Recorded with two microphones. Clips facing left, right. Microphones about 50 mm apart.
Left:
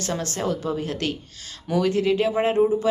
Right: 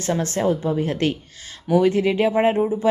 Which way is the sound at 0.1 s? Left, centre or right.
Right.